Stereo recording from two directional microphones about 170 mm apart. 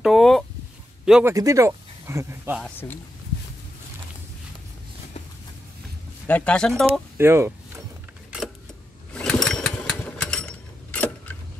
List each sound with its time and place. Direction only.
0.0 s a sound: centre (ahead or behind)
1.2 s speech: 20° right (ahead or behind)
2.6 s speech: 10° left (ahead or behind)
6.2 s speech: 10° left (ahead or behind)
7.2 s a sound: 15° right (ahead or behind)
9.1 s lawn mower: 5° left (ahead or behind)